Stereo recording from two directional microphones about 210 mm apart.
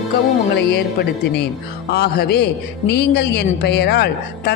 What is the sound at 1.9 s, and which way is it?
Speech, 50° left (ahead or behind).